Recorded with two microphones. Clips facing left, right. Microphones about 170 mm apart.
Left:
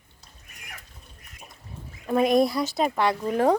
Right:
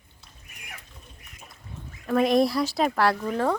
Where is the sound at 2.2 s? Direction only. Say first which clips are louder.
Left 1 dB; centre (ahead or behind).